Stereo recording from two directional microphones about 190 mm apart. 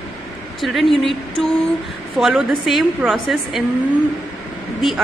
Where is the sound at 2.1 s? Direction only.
Centre (ahead or behind).